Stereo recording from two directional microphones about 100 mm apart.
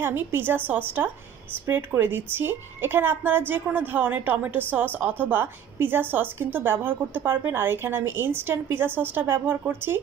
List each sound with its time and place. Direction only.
0.0 s a woman's voice: 20° right (ahead or behind)